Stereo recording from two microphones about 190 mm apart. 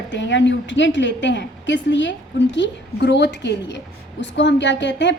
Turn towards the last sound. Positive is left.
turn(degrees=70)  # may be behind; listen again after turning